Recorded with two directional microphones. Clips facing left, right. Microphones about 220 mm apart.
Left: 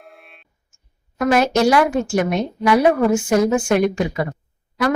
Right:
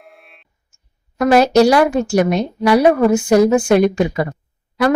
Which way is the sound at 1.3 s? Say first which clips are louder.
Right 5 dB; 35° right (ahead or behind).